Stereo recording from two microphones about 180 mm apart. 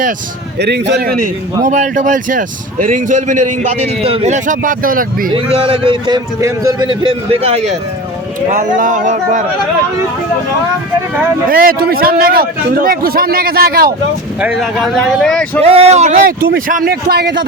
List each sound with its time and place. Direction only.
0.6 s a man's voice: 65° right (ahead or behind)
1.6 s a man's voice: 45° right (ahead or behind)
5.3 s a man's voice: 30° right (ahead or behind)
11.4 s a man's voice: 55° right (ahead or behind)
14.4 s speech: centre (ahead or behind)
15.6 s a man's voice: 35° right (ahead or behind); by 17.4 s 60° right (ahead or behind)